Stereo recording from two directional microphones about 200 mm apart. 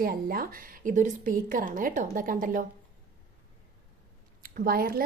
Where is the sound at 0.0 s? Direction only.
45° right (ahead or behind).